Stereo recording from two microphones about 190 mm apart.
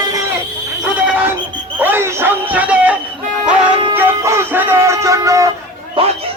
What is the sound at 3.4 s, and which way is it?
Music, 5° right (ahead or behind).